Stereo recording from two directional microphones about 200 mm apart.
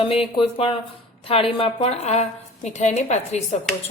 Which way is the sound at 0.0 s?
25° left (ahead or behind).